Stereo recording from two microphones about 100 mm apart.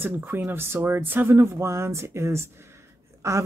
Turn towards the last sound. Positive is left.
turn(degrees=-30)  # may be behind; listen again after turning